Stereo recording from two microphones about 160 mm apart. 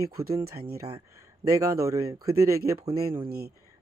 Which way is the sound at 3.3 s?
75° right (ahead or behind).